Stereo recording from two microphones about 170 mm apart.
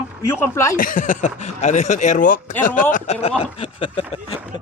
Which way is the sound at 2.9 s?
40° left (ahead or behind).